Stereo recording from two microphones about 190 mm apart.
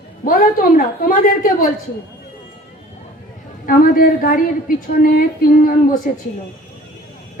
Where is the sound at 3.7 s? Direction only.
50° left (ahead or behind).